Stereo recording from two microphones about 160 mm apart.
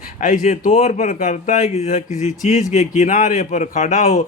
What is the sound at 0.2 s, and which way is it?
A man's voice, 55° left (ahead or behind).